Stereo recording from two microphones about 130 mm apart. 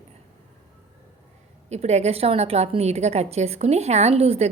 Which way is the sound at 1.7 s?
55° right (ahead or behind).